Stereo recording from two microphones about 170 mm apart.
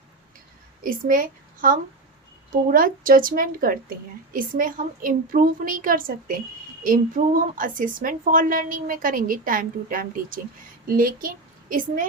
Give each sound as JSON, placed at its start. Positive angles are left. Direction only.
{"t": 0.8, "sound": "a woman's voice", "side_deg": -55}